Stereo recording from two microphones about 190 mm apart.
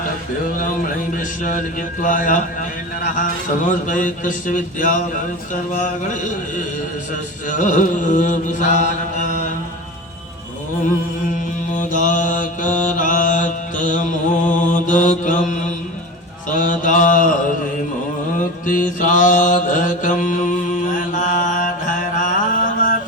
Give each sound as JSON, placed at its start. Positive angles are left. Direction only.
{"t": 0.4, "sound": "speech", "side_deg": 45}
{"t": 7.4, "sound": "mantra", "side_deg": 40}
{"t": 11.3, "sound": "mantra", "side_deg": 45}
{"t": 16.5, "sound": "speech", "side_deg": 45}
{"t": 18.3, "sound": "mantra", "side_deg": 45}